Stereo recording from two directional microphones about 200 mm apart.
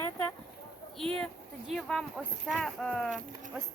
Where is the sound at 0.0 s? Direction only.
10° left (ahead or behind).